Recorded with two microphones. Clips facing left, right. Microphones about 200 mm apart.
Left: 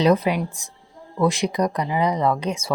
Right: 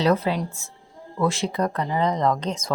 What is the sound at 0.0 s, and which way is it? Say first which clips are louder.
A woman's voice: left 3 dB; 15° left (ahead or behind).